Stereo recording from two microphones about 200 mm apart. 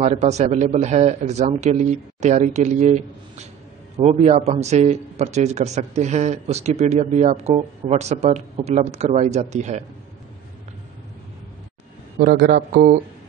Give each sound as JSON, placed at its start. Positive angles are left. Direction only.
{"t": 0.0, "sound": "a man's voice", "side_deg": -35}
{"t": 12.2, "sound": "a man's voice", "side_deg": -50}